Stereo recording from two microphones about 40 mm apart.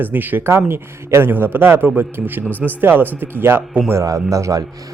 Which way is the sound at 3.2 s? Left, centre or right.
Right.